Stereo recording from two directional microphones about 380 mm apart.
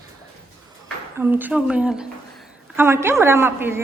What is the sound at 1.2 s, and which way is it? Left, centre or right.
A woman's voice, centre.